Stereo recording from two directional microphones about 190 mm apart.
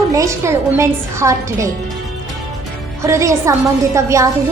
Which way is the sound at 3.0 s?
15° right (ahead or behind).